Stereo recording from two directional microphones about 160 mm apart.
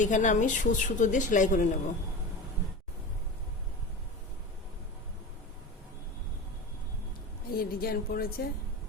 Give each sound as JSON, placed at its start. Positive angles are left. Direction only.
{"t": 0.0, "sound": "a woman's voice", "side_deg": 50}
{"t": 7.5, "sound": "speech", "side_deg": 70}